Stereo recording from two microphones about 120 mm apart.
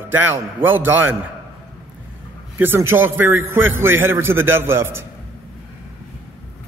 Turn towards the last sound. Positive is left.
turn(degrees=-20)  # may be behind; listen again after turning